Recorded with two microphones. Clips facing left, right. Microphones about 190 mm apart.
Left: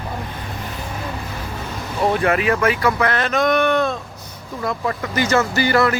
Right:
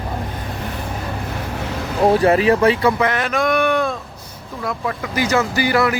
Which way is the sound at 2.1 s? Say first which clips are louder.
Right 5 dB; 30° right (ahead or behind).